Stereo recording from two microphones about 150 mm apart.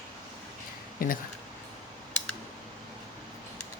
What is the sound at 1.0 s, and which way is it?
Speech, 70° left (ahead or behind).